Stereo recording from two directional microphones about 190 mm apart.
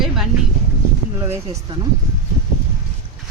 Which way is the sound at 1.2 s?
15° right (ahead or behind).